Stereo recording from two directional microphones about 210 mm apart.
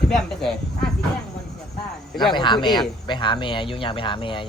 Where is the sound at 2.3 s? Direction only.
20° left (ahead or behind).